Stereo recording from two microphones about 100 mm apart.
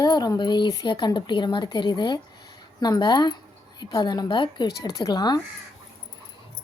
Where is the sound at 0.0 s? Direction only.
45° left (ahead or behind).